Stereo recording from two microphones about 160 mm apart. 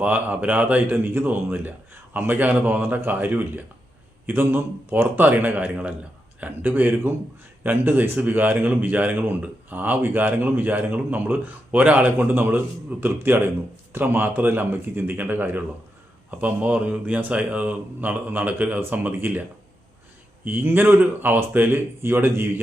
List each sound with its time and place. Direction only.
0.0 s speech: 10° right (ahead or behind)
20.4 s speech: 10° right (ahead or behind)